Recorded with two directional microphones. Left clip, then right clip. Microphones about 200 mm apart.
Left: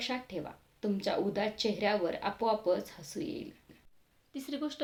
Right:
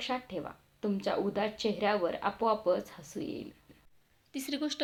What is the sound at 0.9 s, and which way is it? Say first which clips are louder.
Speech: even; 5° right (ahead or behind).